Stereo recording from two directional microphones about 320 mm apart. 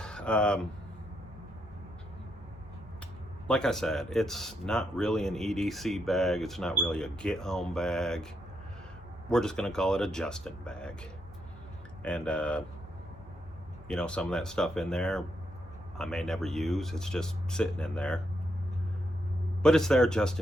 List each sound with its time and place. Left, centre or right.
0.0 s a sound: centre
3.4 s speech: centre
9.3 s speech: centre
13.8 s speech: centre
19.6 s speech: centre